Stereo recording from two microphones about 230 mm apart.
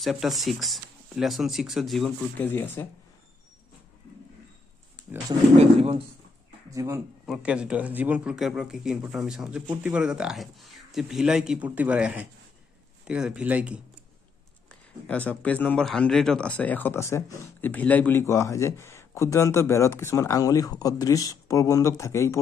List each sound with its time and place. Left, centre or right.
0.0 s a man's voice: centre
5.6 s speech: right
6.7 s a man's voice: centre
14.7 s speech: centre